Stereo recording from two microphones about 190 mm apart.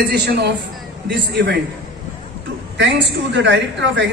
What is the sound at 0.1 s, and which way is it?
A man's voice, 60° right (ahead or behind).